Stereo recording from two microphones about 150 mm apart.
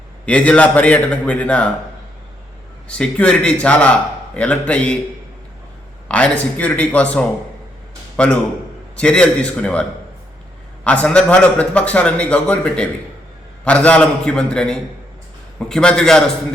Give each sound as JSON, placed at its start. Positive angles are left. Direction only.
{"t": 0.3, "sound": "a man's voice", "side_deg": 10}
{"t": 2.9, "sound": "a man's voice", "side_deg": 5}
{"t": 6.1, "sound": "a man's voice", "side_deg": 10}
{"t": 10.8, "sound": "a man's voice", "side_deg": 10}